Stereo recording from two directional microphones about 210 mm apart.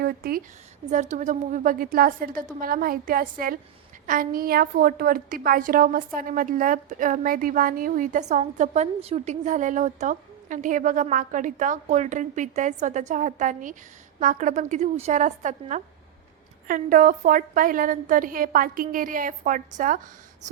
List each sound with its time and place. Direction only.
0.0 s a woman's voice: 45° right (ahead or behind)